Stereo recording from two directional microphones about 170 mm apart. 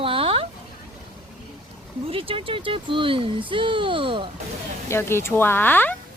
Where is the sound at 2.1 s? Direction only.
35° right (ahead or behind).